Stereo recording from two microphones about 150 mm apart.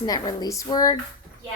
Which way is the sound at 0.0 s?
25° left (ahead or behind).